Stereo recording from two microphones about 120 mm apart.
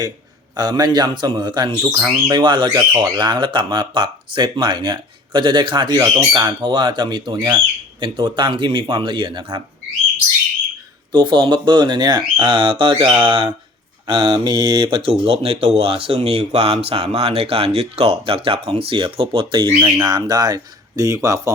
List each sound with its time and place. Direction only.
0.5 s speech: 35° right (ahead or behind)
1.8 s speech: 20° right (ahead or behind)
2.3 s speech: 40° right (ahead or behind)
11.1 s speech: 40° right (ahead or behind)
19.6 s speech: 30° right (ahead or behind)